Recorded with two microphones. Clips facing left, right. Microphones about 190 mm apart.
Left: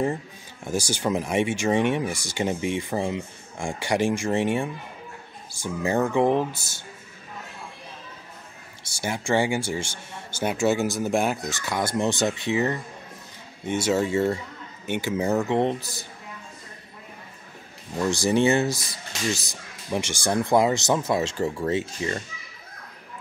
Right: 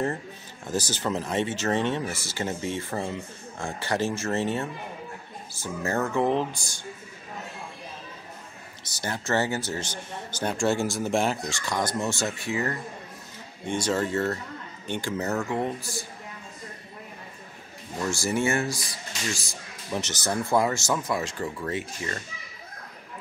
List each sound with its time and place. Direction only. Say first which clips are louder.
0.7 s speech: left 3 dB; 10° left (ahead or behind)
8.8 s speech: left 3 dB; 10° left (ahead or behind)
13.7 s speech: left 3 dB; 10° left (ahead or behind); by 15.9 s 25° left (ahead or behind)
18.1 s speech: left 5 dB; 20° left (ahead or behind)